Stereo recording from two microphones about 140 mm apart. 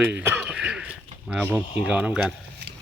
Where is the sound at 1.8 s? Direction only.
5° right (ahead or behind).